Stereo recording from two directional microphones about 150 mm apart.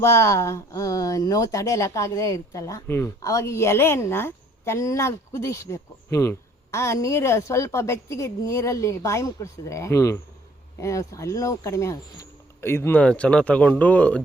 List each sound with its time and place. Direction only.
0.0 s speech: 20° left (ahead or behind)